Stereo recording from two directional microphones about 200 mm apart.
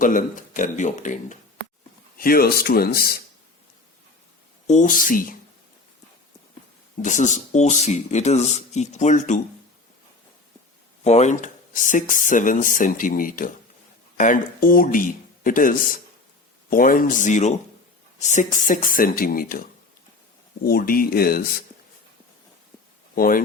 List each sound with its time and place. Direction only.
0.0 s speech: 45° left (ahead or behind)
4.6 s speech: 35° left (ahead or behind)
7.0 s speech: 35° left (ahead or behind)
11.0 s speech: 35° left (ahead or behind)
20.7 s speech: 45° left (ahead or behind)
23.1 s speech: 45° left (ahead or behind)